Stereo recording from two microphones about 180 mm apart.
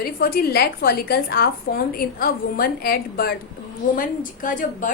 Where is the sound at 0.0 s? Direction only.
55° left (ahead or behind).